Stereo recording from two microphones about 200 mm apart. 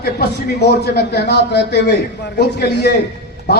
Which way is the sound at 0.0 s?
55° left (ahead or behind).